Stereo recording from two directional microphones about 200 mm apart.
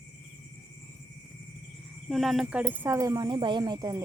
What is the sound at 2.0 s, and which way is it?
Speech, centre (ahead or behind).